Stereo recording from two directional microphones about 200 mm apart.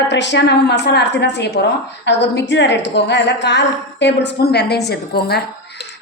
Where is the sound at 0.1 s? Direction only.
60° left (ahead or behind).